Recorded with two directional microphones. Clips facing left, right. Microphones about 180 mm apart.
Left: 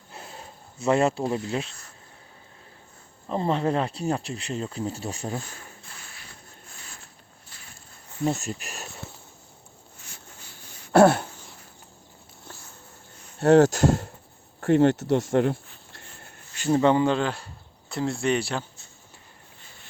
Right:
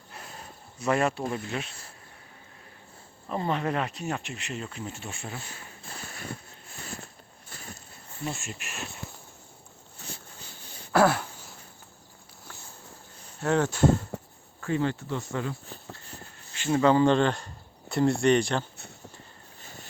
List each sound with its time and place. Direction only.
0.8 s speech: 25° left (ahead or behind)
3.2 s speech: 30° left (ahead or behind)
5.9 s a sound: 50° right (ahead or behind)
7.5 s vehicle: 50° right (ahead or behind)
8.2 s speech: 40° left (ahead or behind)
10.9 s a sound: 25° left (ahead or behind)
13.4 s speech: 80° left
14.6 s speech: 70° left (ahead or behind)
16.7 s speech: 25° left (ahead or behind)
17.0 s speech: 5° left (ahead or behind)